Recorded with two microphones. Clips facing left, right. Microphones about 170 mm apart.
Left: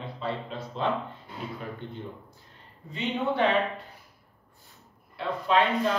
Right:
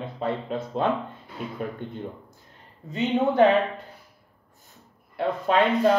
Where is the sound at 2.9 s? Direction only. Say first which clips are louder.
Right 6 dB; 45° right (ahead or behind).